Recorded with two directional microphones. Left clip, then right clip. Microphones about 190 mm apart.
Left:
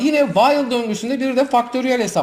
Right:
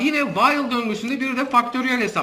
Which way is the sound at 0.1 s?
25° left (ahead or behind).